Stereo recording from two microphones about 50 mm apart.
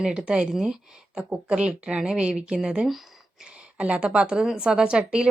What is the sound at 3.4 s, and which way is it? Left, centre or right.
A woman's voice, right.